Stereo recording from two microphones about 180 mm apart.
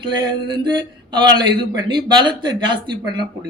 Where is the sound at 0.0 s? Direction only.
25° right (ahead or behind).